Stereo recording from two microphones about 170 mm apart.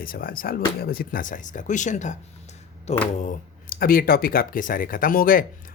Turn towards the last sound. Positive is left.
turn(degrees=55)  # may be behind; listen again after turning